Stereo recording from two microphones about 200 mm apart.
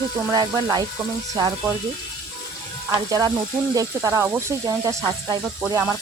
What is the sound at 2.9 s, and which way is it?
Speech, 15° right (ahead or behind).